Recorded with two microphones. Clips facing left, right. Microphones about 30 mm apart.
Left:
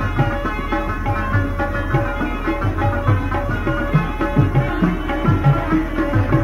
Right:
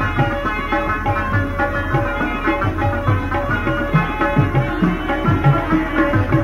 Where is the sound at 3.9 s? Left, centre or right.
Right.